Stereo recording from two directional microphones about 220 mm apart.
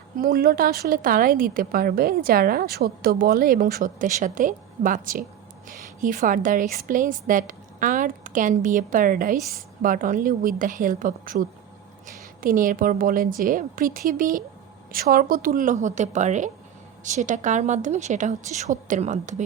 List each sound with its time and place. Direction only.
0.2 s a woman's voice: 40° right (ahead or behind)